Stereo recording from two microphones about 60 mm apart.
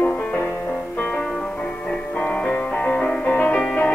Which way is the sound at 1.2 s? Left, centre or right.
Centre.